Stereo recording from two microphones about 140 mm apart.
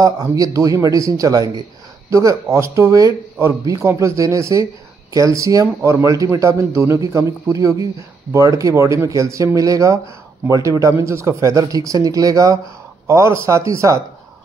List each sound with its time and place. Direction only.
0.0 s a man's voice: 25° right (ahead or behind)